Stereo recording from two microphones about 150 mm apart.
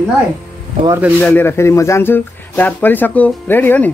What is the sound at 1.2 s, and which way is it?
Speech, 15° left (ahead or behind).